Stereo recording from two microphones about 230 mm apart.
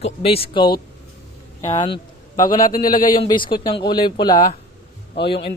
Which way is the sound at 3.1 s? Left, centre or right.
Left.